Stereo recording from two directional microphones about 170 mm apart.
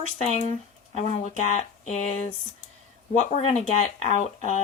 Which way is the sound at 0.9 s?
40° left (ahead or behind).